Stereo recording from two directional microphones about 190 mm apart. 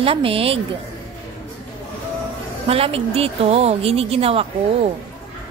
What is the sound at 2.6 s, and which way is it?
Speech, 30° right (ahead or behind).